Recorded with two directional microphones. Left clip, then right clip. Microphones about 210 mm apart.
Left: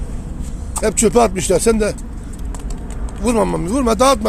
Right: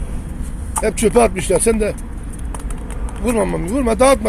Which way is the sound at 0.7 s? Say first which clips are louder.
Even; 20° left (ahead or behind).